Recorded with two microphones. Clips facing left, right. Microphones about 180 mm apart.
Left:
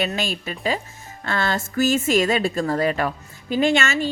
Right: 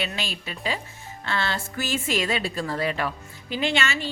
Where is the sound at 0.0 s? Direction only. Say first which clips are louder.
Left 6 dB; 45° left (ahead or behind).